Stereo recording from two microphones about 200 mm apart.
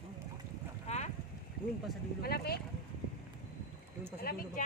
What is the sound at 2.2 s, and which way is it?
Speech, 50° left (ahead or behind).